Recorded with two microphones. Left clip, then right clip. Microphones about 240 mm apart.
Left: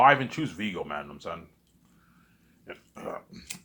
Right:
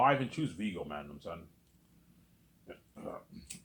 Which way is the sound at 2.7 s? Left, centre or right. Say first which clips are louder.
Left 7 dB; left.